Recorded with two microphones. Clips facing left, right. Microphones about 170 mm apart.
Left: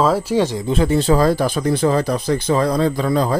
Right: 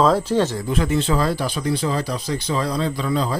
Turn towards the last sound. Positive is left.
turn(degrees=45)  # may be behind; listen again after turning